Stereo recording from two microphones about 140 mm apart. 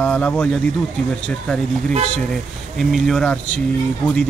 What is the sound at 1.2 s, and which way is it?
Speech, 5° left (ahead or behind).